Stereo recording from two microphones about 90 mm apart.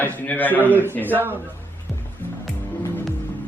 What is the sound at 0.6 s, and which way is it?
Speech, 20° right (ahead or behind).